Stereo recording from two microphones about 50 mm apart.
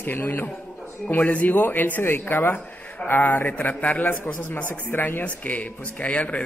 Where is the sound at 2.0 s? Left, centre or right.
Left.